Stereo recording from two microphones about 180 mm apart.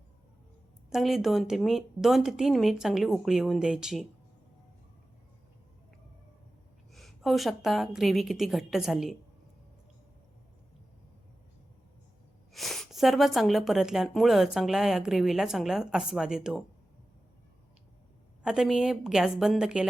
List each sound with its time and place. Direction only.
0.9 s speech: centre (ahead or behind)
6.9 s speech: centre (ahead or behind)
12.5 s speech: centre (ahead or behind)
18.4 s speech: 5° right (ahead or behind)